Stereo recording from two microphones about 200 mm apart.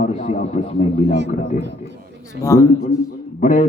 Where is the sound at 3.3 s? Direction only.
40° left (ahead or behind).